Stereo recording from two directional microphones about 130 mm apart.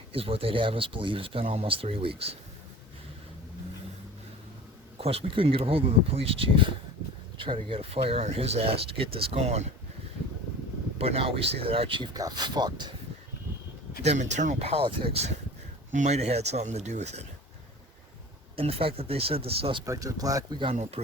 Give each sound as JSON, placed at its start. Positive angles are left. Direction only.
{"t": 0.1, "sound": "speech", "side_deg": -45}
{"t": 4.9, "sound": "speech", "side_deg": -50}
{"t": 10.9, "sound": "speech", "side_deg": -50}
{"t": 12.1, "sound": "speech", "side_deg": -30}
{"t": 14.0, "sound": "speech", "side_deg": -60}
{"t": 15.9, "sound": "speech", "side_deg": -65}
{"t": 18.5, "sound": "speech", "side_deg": -50}
{"t": 19.8, "sound": "speech", "side_deg": -25}